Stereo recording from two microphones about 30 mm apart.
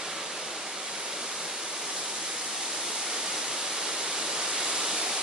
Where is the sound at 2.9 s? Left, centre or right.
Centre.